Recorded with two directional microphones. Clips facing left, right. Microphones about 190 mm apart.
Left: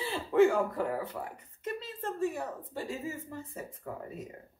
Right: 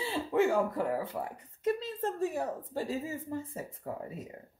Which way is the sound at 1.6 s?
40° right (ahead or behind).